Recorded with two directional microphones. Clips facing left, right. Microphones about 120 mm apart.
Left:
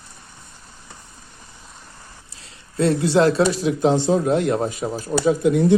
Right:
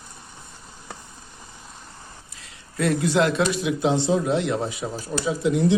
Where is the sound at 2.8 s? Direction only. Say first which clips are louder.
Left 4 dB; 30° left (ahead or behind); by 5.7 s 50° left (ahead or behind).